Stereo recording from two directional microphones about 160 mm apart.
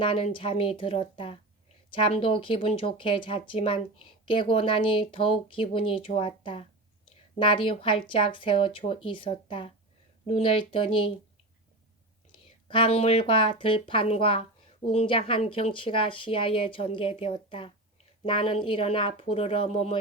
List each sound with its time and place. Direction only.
0.0 s speech: 35° left (ahead or behind)
12.3 s speech: 30° left (ahead or behind)